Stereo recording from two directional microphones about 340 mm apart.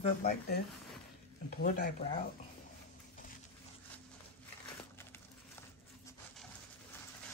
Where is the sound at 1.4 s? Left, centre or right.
Left.